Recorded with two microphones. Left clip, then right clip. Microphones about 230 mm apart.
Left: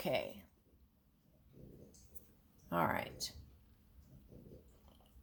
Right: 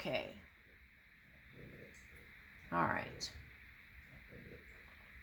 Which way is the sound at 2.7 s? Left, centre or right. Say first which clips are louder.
Even; left.